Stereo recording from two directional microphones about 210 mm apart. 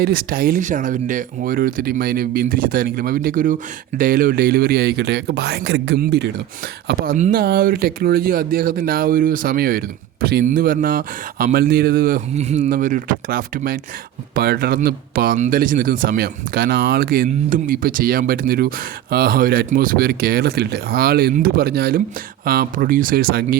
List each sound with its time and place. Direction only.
0.0 s speech: 45° right (ahead or behind)